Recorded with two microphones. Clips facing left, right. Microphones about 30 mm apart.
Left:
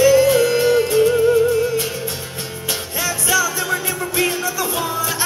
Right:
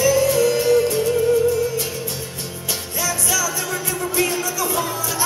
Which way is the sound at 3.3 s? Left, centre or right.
Left.